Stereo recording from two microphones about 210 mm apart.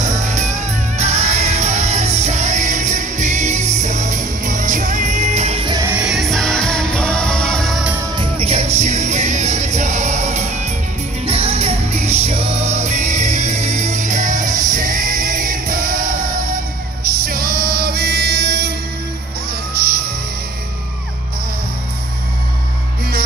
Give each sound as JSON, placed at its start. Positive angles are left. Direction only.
{"t": 0.0, "sound": "music", "side_deg": -35}
{"t": 5.9, "sound": "music", "side_deg": -5}
{"t": 8.2, "sound": "music", "side_deg": -30}
{"t": 19.7, "sound": "music", "side_deg": -45}